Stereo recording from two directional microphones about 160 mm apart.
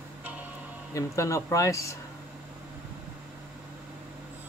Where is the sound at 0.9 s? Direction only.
20° left (ahead or behind).